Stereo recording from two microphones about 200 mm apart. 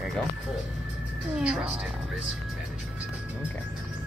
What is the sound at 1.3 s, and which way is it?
Speech, 5° right (ahead or behind).